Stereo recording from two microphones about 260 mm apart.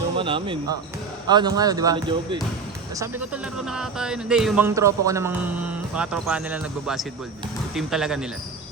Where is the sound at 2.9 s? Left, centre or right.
Centre.